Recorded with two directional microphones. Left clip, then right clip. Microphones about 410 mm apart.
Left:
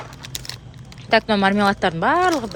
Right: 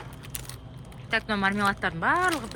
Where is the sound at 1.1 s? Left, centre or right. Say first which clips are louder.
Left 9 dB; centre.